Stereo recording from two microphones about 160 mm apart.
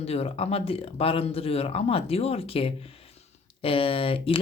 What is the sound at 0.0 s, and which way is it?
Speech, 40° left (ahead or behind).